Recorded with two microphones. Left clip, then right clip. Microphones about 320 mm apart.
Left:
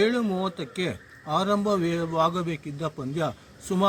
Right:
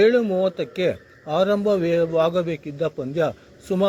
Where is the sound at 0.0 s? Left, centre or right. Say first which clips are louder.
Right 8 dB; centre.